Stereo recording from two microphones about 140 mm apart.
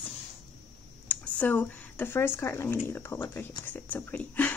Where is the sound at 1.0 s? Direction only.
10° left (ahead or behind).